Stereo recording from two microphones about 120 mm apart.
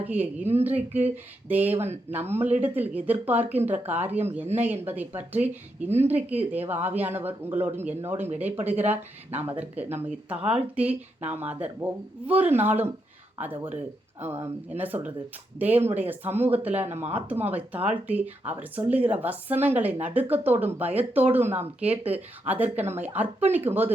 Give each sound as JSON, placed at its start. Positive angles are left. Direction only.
{"t": 0.0, "sound": "speech", "side_deg": -15}